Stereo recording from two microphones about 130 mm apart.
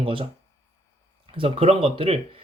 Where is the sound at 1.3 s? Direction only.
45° right (ahead or behind).